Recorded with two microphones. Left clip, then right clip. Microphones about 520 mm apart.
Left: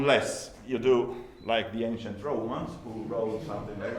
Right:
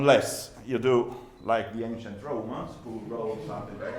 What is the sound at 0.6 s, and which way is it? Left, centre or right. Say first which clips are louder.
Speech: even; right.